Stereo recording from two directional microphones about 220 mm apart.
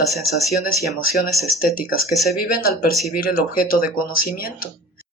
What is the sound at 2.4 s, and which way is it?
Speech, 40° left (ahead or behind).